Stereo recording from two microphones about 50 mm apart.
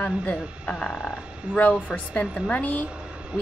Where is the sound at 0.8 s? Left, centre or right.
Centre.